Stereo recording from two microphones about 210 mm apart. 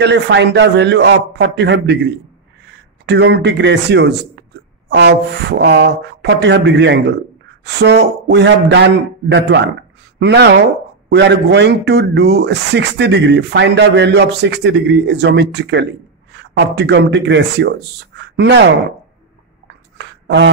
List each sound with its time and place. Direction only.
0.0 s speech: 55° right (ahead or behind)